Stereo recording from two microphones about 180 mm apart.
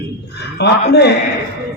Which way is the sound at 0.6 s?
70° left (ahead or behind).